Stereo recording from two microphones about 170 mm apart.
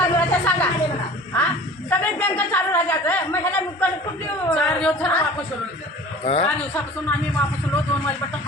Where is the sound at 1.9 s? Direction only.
10° left (ahead or behind).